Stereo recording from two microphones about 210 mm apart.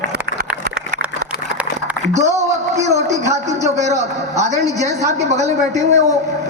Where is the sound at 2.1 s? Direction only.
35° right (ahead or behind).